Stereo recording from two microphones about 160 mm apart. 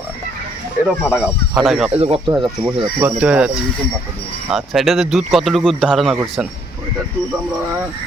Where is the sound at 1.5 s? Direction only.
5° right (ahead or behind).